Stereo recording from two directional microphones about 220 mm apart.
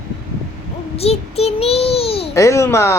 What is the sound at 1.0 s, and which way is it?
Child singing, 25° left (ahead or behind).